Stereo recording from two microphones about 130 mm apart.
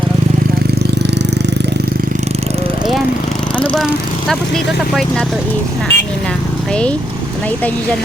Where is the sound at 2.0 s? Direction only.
90° right.